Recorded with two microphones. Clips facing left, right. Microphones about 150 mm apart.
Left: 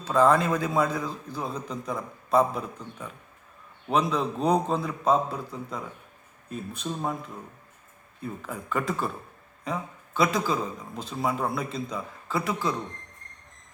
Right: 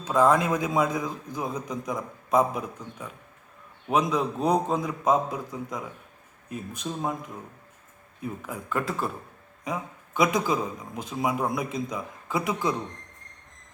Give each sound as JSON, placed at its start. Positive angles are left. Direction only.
{"t": 0.0, "sound": "a man's voice", "side_deg": -10}